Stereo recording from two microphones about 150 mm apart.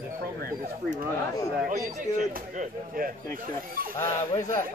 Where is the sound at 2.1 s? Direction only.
60° right (ahead or behind).